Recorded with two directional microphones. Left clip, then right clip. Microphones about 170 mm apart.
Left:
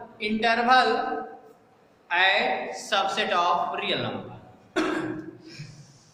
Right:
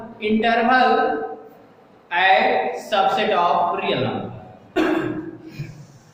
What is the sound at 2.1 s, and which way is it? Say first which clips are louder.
A man's voice: right 6 dB; 20° left (ahead or behind).